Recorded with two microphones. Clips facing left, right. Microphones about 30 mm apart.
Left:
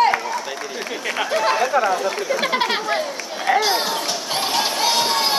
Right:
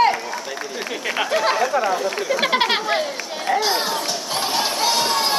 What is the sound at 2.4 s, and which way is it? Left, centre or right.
Speech, right.